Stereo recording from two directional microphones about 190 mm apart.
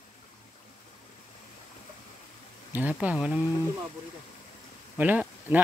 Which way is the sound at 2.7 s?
10° right (ahead or behind).